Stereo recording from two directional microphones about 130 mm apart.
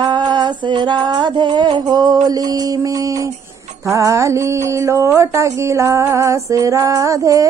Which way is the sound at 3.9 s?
25° right (ahead or behind).